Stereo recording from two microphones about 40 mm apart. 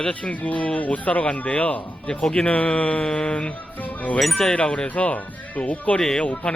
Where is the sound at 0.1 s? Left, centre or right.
Left.